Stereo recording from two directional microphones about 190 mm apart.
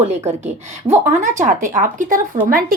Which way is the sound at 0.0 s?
35° right (ahead or behind).